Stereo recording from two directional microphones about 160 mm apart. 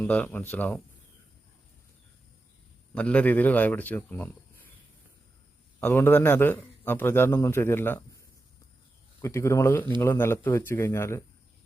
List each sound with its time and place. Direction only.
0.0 s a man's voice: 10° left (ahead or behind)
2.9 s a man's voice: 10° left (ahead or behind)
5.8 s a man's voice: 10° left (ahead or behind)
9.2 s a man's voice: 20° left (ahead or behind)